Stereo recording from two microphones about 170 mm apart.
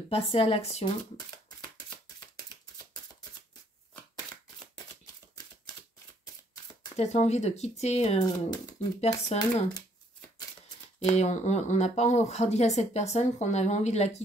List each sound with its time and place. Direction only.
0.1 s speech: 35° left (ahead or behind)
2.3 s a sound: 20° left (ahead or behind)
7.0 s speech: 40° left (ahead or behind)
11.0 s speech: 40° left (ahead or behind)